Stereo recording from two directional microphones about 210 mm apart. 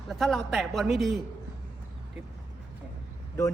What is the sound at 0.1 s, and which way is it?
A man's voice, centre (ahead or behind).